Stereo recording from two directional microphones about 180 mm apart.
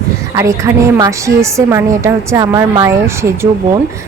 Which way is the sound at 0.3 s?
15° right (ahead or behind).